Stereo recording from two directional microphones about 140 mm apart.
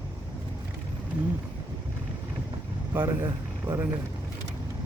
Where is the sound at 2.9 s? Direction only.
20° right (ahead or behind).